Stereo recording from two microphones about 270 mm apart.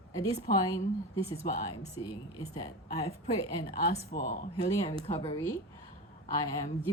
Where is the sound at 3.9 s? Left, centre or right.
Left.